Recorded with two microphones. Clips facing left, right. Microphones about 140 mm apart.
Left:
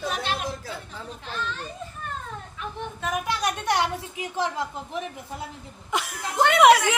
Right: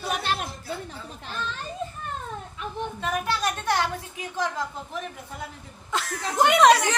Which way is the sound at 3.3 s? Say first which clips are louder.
Left 1 dB; 20° left (ahead or behind).